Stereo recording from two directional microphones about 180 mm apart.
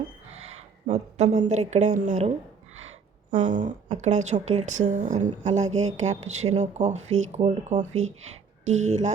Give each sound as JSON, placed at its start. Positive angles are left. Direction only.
{"t": 0.9, "sound": "speech", "side_deg": -40}
{"t": 3.3, "sound": "a woman's voice", "side_deg": -45}